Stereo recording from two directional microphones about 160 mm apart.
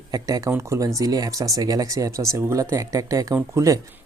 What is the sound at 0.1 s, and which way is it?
Speech, 20° right (ahead or behind).